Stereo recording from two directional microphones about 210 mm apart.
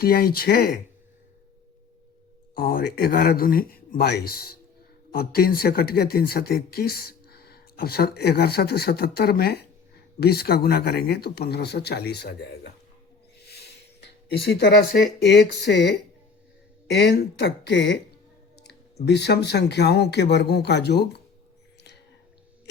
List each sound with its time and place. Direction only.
0.0 s speech: 45° left (ahead or behind)
2.6 s speech: 45° left (ahead or behind)
19.0 s speech: 55° left (ahead or behind)